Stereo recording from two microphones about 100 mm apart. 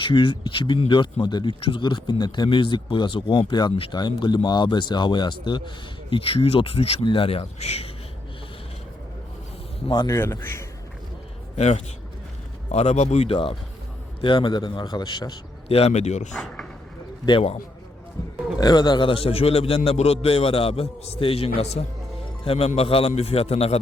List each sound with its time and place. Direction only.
0.0 s speech: 55° left (ahead or behind); by 7.9 s 85° left
9.8 s speech: 55° left (ahead or behind)
10.1 s a man's voice: 30° left (ahead or behind)
12.7 s a man's voice: 90° left; by 13.6 s 65° left (ahead or behind)
14.2 s speech: 55° left (ahead or behind)
15.7 s a man's voice: 90° left
16.3 s speech: 10° left (ahead or behind)
18.6 s a man's voice: 45° left (ahead or behind); by 23.8 s 90° left